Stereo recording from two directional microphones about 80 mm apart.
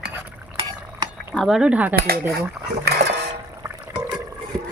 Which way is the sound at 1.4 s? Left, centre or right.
Centre.